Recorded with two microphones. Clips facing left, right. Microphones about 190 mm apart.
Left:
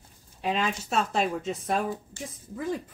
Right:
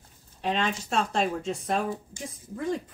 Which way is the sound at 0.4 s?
5° left (ahead or behind).